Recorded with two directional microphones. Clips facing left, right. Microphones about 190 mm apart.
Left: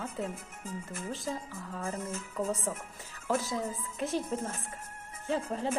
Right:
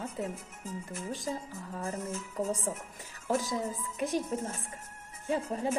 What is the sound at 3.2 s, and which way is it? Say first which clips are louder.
A woman's voice: right 1 dB; 15° right (ahead or behind).